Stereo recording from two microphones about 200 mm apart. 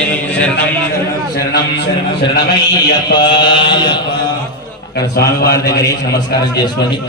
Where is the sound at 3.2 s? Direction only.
25° left (ahead or behind).